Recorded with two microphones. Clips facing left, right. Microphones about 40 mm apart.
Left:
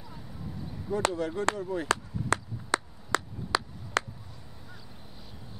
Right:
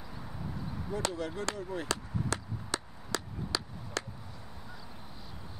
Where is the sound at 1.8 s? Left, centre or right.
Left.